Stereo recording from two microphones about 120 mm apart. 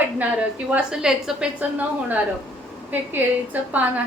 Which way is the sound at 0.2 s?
10° right (ahead or behind).